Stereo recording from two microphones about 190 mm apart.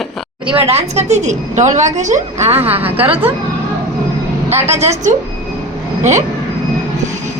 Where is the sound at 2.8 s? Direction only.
10° right (ahead or behind).